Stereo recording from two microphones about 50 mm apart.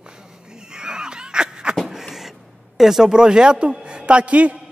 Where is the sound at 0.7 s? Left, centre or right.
Centre.